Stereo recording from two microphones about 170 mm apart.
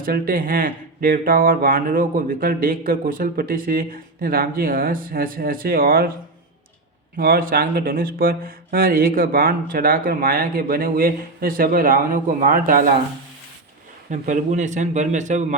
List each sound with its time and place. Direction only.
0.0 s speech: 55° right (ahead or behind)
7.2 s speech: 60° right (ahead or behind)
14.1 s a man's voice: 45° right (ahead or behind)